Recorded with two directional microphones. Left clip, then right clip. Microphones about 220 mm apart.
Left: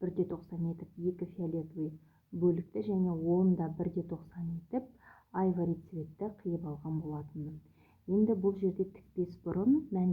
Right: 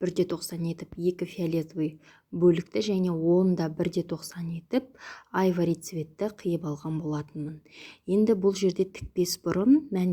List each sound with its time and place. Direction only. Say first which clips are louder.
0.0 s a woman's voice: right 8 dB; 25° right (ahead or behind)